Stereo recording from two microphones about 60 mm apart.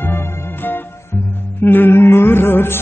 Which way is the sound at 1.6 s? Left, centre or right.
Left.